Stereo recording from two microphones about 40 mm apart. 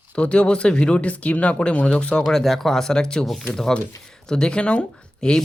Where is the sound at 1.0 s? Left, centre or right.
Left.